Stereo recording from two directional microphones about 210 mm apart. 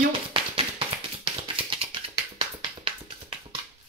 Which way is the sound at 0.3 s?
25° right (ahead or behind).